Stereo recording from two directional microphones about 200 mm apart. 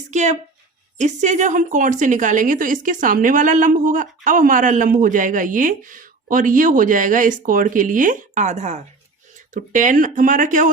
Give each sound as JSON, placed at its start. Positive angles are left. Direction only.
{"t": 0.1, "sound": "a woman's voice", "side_deg": -35}